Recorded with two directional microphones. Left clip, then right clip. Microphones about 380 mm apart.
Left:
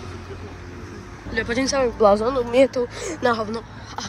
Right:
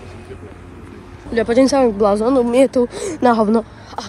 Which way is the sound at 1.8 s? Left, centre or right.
Right.